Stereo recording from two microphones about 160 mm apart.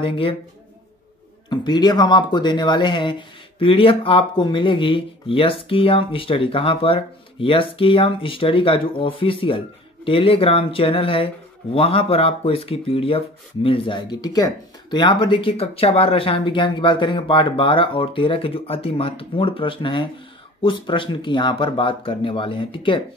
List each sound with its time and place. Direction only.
0.0 s speech: 35° left (ahead or behind)
1.5 s speech: 25° left (ahead or behind)